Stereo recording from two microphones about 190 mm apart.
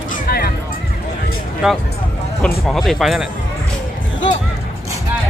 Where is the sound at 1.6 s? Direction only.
5° right (ahead or behind).